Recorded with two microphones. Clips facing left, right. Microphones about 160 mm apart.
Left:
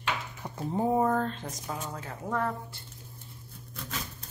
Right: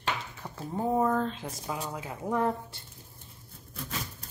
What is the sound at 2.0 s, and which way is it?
Speech, 15° right (ahead or behind).